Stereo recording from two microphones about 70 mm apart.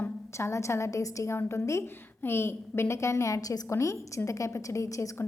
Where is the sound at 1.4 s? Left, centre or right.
Left.